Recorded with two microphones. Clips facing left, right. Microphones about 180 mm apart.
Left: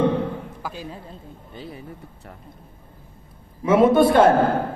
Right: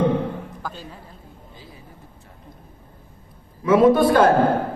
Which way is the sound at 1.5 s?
65° left (ahead or behind).